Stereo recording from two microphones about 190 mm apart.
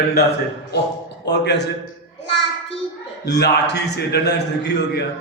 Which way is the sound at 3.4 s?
60° left (ahead or behind).